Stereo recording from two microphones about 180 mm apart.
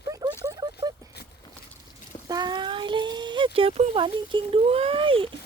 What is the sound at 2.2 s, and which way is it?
Speech, 25° right (ahead or behind).